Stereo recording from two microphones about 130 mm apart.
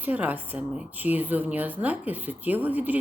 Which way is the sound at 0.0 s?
10° right (ahead or behind).